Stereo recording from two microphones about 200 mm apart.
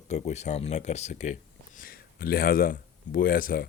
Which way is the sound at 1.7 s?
45° left (ahead or behind).